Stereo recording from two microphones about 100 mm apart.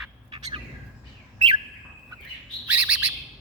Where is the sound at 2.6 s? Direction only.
15° right (ahead or behind).